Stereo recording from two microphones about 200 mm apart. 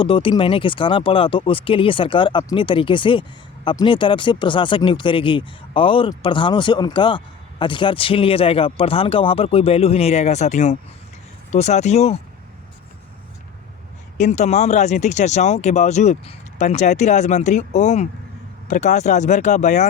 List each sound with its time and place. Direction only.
0.0 s speech: 25° left (ahead or behind)
14.2 s speech: 35° left (ahead or behind)